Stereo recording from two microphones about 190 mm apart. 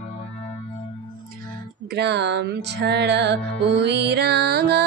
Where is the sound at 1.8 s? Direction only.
65° right (ahead or behind).